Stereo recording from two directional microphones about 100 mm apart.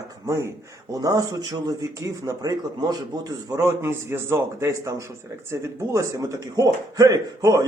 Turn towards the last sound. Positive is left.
turn(degrees=-35)  # may be behind; listen again after turning